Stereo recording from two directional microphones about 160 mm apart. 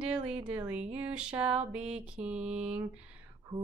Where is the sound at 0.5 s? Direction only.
10° right (ahead or behind).